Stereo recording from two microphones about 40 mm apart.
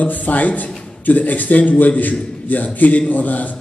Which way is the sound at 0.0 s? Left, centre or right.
Left.